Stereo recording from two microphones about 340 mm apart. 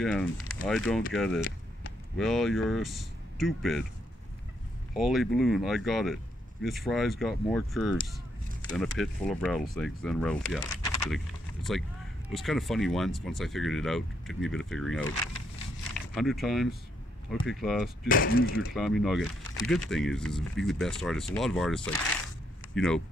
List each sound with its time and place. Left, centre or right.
0.0 s speech: centre
4.9 s speech: centre
11.7 s speech: centre
16.2 s speech: centre
18.0 s speech: left
18.4 s speech: left
18.7 s speech: centre